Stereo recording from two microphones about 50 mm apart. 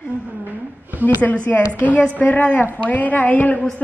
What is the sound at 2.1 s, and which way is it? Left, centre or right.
A woman's voice, left.